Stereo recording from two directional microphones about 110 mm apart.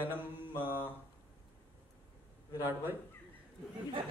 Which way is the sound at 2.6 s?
20° right (ahead or behind).